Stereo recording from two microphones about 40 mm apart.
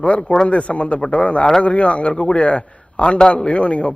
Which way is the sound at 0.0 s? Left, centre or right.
Left.